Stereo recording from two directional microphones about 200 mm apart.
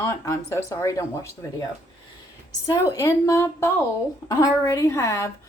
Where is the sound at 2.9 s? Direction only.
15° left (ahead or behind).